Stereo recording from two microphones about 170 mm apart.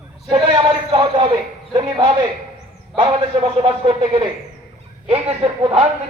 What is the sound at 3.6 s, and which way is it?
Speech, 30° right (ahead or behind).